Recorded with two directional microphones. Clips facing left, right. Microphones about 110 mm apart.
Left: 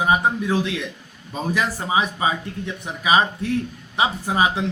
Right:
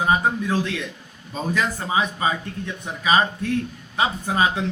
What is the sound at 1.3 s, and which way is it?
A man's voice, 15° left (ahead or behind).